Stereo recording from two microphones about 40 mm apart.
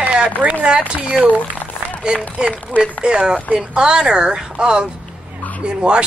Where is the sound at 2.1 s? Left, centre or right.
Right.